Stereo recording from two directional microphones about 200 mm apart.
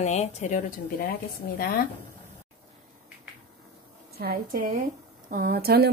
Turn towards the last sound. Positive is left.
turn(degrees=-50)  # may be behind; listen again after turning